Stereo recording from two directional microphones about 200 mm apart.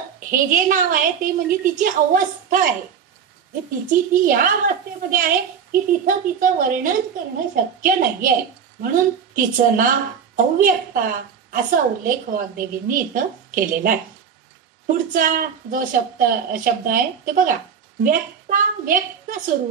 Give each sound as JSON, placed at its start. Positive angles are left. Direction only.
{"t": 0.3, "sound": "a woman's voice", "side_deg": -40}
{"t": 3.9, "sound": "a woman's voice", "side_deg": -45}